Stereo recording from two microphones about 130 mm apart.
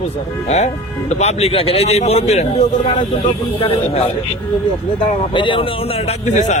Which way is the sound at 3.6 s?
45° left (ahead or behind).